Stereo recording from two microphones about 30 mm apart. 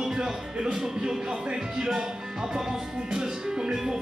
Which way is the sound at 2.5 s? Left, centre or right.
Right.